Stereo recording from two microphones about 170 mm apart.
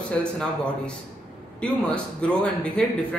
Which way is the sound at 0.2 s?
5° left (ahead or behind).